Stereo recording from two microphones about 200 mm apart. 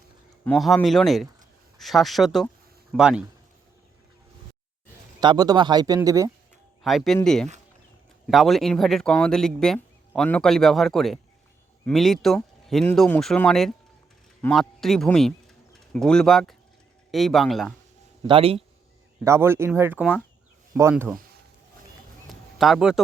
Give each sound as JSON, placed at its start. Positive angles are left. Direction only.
{"t": 0.4, "sound": "speech", "side_deg": 0}
{"t": 5.2, "sound": "speech", "side_deg": -20}
{"t": 6.8, "sound": "speech", "side_deg": 0}
{"t": 18.3, "sound": "speech", "side_deg": -30}
{"t": 19.2, "sound": "speech", "side_deg": -15}
{"t": 22.3, "sound": "a sound", "side_deg": 0}